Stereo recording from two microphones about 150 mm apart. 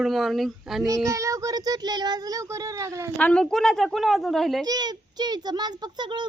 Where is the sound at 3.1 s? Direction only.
10° left (ahead or behind).